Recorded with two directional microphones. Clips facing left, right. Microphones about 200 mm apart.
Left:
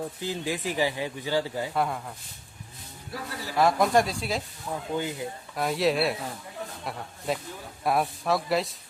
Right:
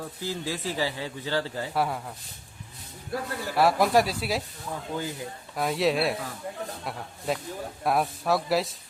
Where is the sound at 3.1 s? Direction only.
50° right (ahead or behind).